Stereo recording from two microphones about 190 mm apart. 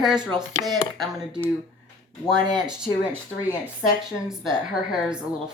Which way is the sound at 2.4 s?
20° right (ahead or behind).